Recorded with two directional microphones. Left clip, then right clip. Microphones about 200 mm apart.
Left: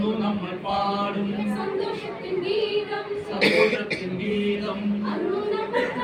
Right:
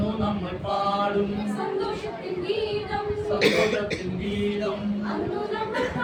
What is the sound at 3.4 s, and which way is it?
Speech, centre (ahead or behind).